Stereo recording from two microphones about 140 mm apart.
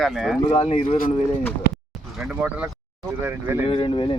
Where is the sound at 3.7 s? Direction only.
35° left (ahead or behind).